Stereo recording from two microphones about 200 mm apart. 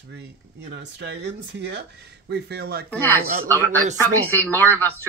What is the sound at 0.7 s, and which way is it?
Speech, 55° right (ahead or behind).